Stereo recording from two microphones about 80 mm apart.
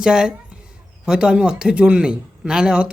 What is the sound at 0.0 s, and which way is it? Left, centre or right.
A man's voice, centre.